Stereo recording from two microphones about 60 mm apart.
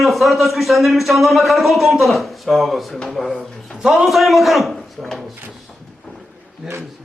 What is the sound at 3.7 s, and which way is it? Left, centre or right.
Speech, centre.